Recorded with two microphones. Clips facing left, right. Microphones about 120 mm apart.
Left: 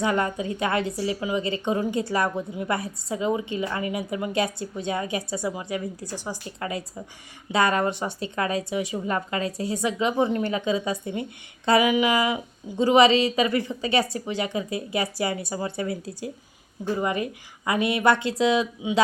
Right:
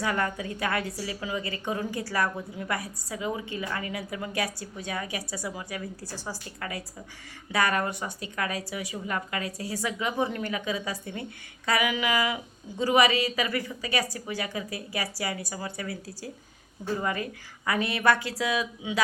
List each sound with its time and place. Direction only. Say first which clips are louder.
0.0 s a woman's voice: left 4 dB; 20° left (ahead or behind)